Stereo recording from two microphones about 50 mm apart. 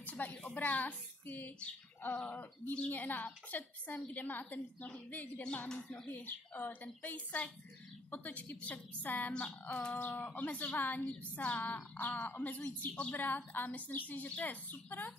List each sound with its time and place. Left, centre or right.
0.0 s speech: left
5.7 s speech: centre
6.0 s speech: left